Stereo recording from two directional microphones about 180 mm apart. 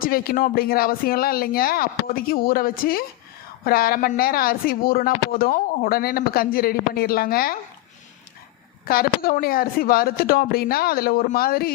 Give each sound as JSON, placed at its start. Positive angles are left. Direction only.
{"t": 0.0, "sound": "speech", "side_deg": 55}
{"t": 8.9, "sound": "speech", "side_deg": 55}